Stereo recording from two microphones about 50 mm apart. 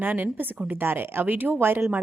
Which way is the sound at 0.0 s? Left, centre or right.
Right.